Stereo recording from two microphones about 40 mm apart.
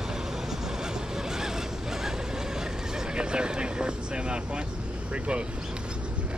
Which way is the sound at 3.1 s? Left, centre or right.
Right.